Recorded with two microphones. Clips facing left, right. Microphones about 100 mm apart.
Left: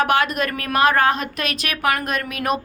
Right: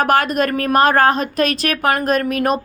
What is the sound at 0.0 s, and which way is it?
A woman's voice, 40° right (ahead or behind).